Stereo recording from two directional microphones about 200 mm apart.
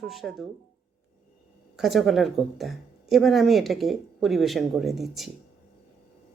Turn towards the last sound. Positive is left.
turn(degrees=0)  # may be behind; listen again after turning